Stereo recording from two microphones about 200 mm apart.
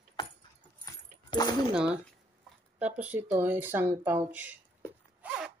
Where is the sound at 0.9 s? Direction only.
20° left (ahead or behind).